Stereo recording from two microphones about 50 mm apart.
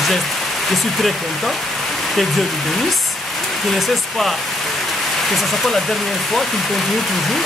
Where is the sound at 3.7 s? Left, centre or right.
Centre.